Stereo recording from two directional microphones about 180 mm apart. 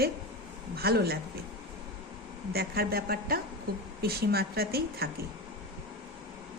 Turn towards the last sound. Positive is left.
turn(degrees=-60)  # may be behind; listen again after turning